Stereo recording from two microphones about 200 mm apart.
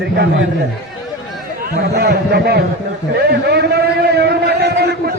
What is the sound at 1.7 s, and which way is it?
A man's voice, 55° right (ahead or behind).